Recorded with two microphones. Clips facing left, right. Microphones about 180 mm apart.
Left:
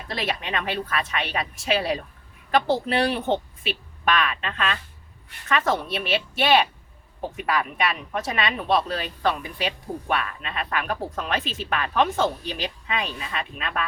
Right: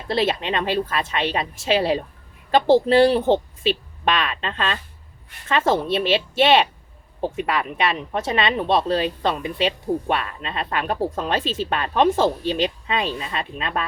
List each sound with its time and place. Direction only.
0.1 s speech: 30° right (ahead or behind)